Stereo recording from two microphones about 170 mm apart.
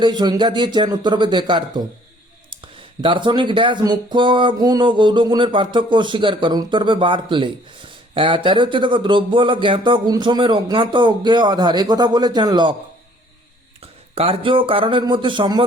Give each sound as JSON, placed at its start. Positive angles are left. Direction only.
{"t": 0.0, "sound": "speech", "side_deg": -25}
{"t": 3.0, "sound": "speech", "side_deg": -30}
{"t": 14.2, "sound": "speech", "side_deg": -30}